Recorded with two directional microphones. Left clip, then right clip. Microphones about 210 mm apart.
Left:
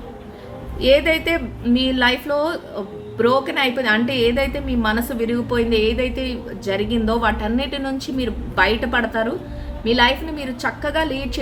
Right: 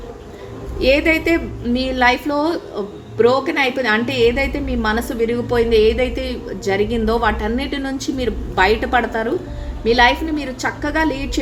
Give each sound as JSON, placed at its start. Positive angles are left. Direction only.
{"t": 0.8, "sound": "a woman's voice", "side_deg": -10}
{"t": 10.3, "sound": "a woman's voice", "side_deg": -10}